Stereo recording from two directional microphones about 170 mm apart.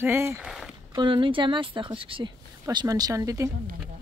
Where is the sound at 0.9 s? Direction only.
30° right (ahead or behind).